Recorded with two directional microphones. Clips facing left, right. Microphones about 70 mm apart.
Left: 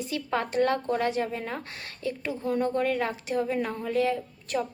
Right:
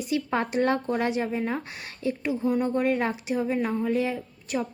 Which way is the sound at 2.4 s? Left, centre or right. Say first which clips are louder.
Right 1 dB; centre.